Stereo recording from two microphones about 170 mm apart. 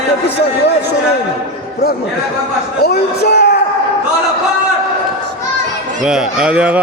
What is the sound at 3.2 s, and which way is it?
Speech, 75° left (ahead or behind).